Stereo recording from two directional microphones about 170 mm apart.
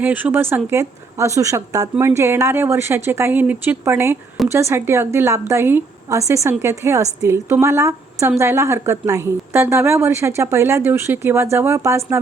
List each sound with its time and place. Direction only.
0.0 s speech: 10° right (ahead or behind)